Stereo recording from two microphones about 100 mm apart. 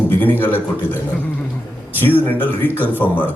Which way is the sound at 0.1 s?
20° left (ahead or behind).